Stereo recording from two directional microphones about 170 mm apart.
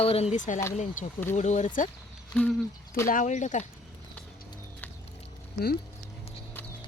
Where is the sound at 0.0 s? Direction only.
35° left (ahead or behind).